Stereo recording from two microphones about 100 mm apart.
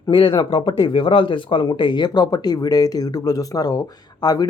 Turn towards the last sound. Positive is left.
turn(degrees=40)  # may be behind; listen again after turning